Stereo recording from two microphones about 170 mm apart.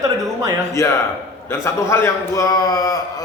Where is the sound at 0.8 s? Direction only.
20° left (ahead or behind).